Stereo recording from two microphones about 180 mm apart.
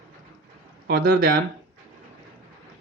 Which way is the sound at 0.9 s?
55° right (ahead or behind).